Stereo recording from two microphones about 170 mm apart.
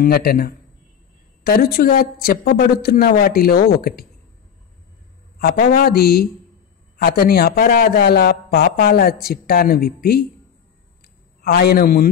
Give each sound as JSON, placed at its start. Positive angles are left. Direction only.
{"t": 0.0, "sound": "a man's voice", "side_deg": 65}
{"t": 5.4, "sound": "a man's voice", "side_deg": 60}
{"t": 11.4, "sound": "a man's voice", "side_deg": 65}